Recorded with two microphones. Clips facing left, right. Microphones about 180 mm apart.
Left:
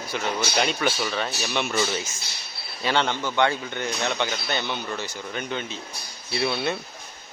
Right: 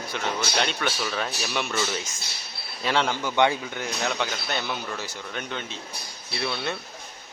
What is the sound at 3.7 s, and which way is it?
Speech, 5° right (ahead or behind).